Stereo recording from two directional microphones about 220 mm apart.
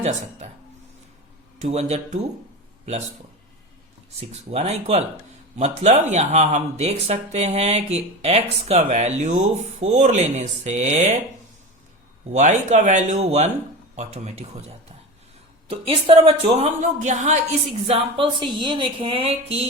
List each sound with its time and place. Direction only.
0.0 s speech: 30° right (ahead or behind)
1.6 s speech: 30° right (ahead or behind)
4.2 s speech: 30° right (ahead or behind)
12.3 s speech: 30° right (ahead or behind)